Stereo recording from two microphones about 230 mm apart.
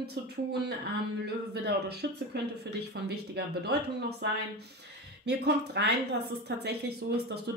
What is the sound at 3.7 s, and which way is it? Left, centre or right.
Speech, right.